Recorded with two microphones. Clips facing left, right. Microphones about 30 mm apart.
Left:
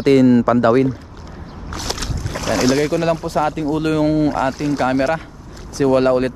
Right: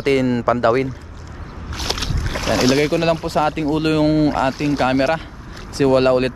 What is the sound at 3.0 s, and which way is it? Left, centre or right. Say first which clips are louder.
Speech: even; right.